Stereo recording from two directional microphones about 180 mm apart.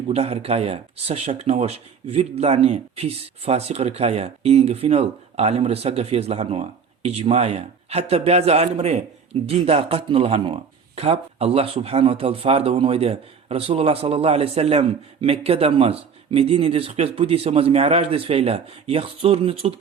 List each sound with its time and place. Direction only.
0.1 s speech: 35° right (ahead or behind)